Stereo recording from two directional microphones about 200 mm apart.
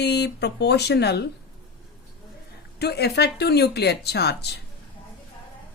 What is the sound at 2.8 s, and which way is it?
Speech, 55° left (ahead or behind).